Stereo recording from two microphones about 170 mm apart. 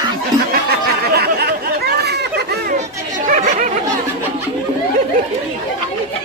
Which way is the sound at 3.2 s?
50° right (ahead or behind).